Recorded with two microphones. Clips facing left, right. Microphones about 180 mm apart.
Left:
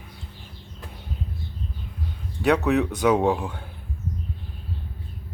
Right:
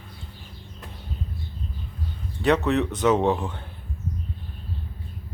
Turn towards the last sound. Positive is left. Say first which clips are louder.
# even
turn(degrees=10)  # may be behind; listen again after turning